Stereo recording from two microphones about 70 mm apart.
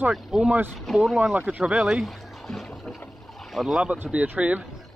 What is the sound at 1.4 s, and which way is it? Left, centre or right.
Speech, centre.